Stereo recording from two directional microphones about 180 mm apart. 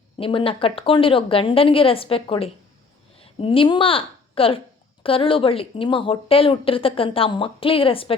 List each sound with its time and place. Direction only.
0.2 s a woman's voice: 30° left (ahead or behind)